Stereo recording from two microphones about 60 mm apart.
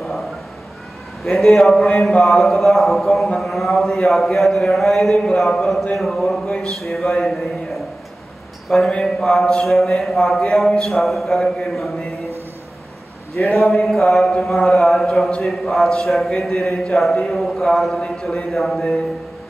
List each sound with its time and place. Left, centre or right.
1.2 s speech: centre
5.1 s speech: centre
8.6 s a man's voice: centre
11.0 s speech: centre
13.4 s a man's voice: left
13.7 s speech: centre
14.8 s speech: centre